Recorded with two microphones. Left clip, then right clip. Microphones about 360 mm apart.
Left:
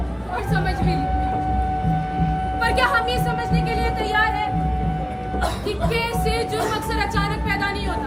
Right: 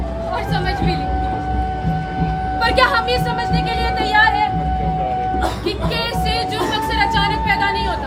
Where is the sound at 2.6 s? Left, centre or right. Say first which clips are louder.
Right 4 dB; centre.